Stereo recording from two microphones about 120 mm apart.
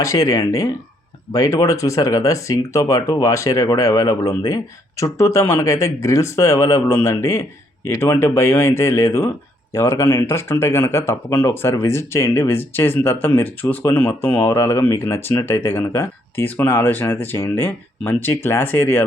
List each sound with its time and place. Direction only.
0.0 s speech: 30° left (ahead or behind)